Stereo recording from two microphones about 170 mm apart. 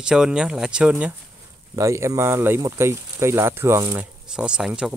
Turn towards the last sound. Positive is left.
turn(degrees=-5)  # may be behind; listen again after turning